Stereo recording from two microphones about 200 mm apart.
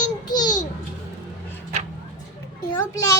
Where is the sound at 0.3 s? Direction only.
20° left (ahead or behind).